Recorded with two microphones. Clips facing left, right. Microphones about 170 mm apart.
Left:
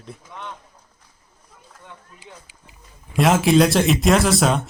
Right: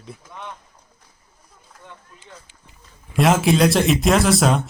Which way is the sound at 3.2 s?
Centre (ahead or behind).